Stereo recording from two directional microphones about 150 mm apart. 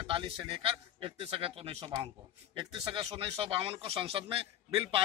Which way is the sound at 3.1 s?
40° right (ahead or behind).